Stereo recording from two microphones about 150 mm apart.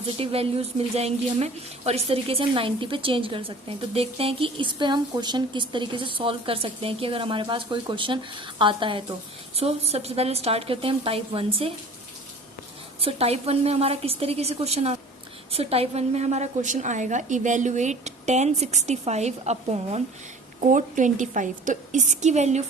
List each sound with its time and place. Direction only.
0.2 s speech: 40° right (ahead or behind)
13.0 s a woman's voice: 40° right (ahead or behind)
20.7 s a woman's voice: 60° right (ahead or behind)